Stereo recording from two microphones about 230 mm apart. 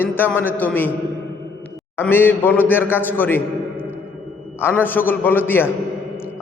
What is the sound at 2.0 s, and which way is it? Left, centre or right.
A man's voice, centre.